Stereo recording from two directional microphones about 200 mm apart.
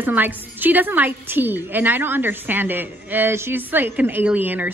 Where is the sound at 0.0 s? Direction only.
10° right (ahead or behind).